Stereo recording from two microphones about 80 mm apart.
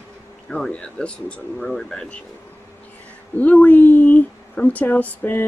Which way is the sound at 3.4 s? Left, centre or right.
Centre.